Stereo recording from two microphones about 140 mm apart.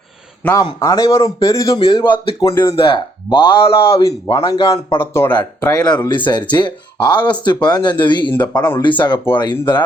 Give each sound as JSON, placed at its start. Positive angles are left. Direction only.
{"t": 0.8, "sound": "a man's voice", "side_deg": 25}
{"t": 4.9, "sound": "speech", "side_deg": 15}
{"t": 6.1, "sound": "speech", "side_deg": 35}